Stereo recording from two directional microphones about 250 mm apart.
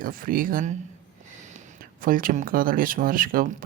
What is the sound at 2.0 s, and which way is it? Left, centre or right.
Speech, right.